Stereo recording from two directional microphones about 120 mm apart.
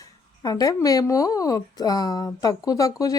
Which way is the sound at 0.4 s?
30° left (ahead or behind).